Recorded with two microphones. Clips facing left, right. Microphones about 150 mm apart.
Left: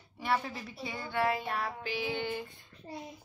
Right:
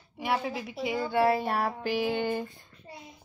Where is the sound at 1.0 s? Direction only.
35° right (ahead or behind).